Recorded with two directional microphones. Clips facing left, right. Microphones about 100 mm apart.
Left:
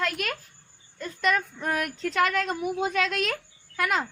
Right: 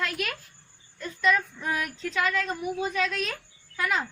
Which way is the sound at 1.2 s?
60° left (ahead or behind).